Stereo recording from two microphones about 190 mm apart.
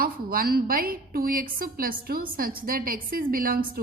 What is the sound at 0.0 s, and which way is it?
A woman's voice, 50° right (ahead or behind).